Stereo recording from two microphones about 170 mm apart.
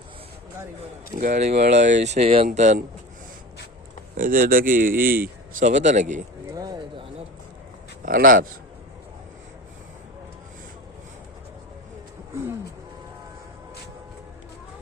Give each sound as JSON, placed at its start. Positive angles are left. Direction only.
{"t": 1.2, "sound": "speech", "side_deg": -45}
{"t": 2.5, "sound": "speech", "side_deg": -50}
{"t": 4.2, "sound": "speech", "side_deg": -55}
{"t": 5.6, "sound": "speech", "side_deg": -45}
{"t": 6.5, "sound": "a sound", "side_deg": -25}
{"t": 8.0, "sound": "speech", "side_deg": -55}